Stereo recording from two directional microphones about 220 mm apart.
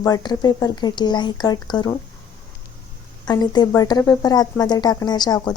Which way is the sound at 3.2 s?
20° left (ahead or behind).